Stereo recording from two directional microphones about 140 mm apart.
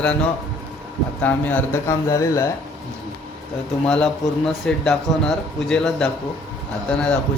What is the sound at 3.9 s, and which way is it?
A man's voice, 5° left (ahead or behind).